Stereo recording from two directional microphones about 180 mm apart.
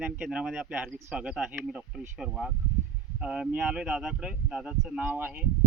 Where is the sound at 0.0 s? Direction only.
5° right (ahead or behind).